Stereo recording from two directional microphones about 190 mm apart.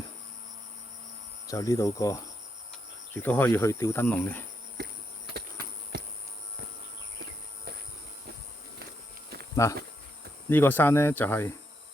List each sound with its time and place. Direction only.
1.5 s speech: 15° left (ahead or behind)
4.8 s insect: 55° right (ahead or behind)
5.9 s insect: 60° right (ahead or behind)
9.6 s speech: 15° left (ahead or behind)